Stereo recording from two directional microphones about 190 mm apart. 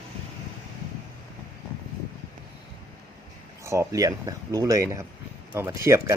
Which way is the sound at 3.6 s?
15° right (ahead or behind).